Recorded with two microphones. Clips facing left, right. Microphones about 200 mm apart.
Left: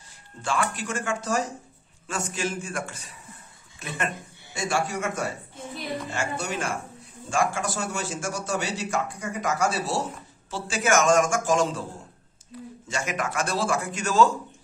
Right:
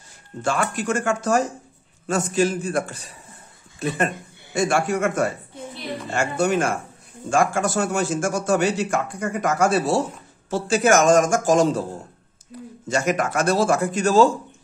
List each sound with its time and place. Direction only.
0.4 s a man's voice: 45° right (ahead or behind)
4.6 s a man's voice: 55° right (ahead or behind)
10.5 s a man's voice: 40° right (ahead or behind)
12.8 s a man's voice: 40° right (ahead or behind)